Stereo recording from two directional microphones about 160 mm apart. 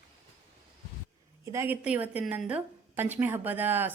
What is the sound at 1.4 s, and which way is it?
A woman's voice, 15° right (ahead or behind).